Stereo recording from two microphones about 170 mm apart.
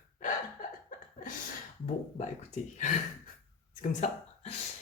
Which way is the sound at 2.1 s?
45° left (ahead or behind).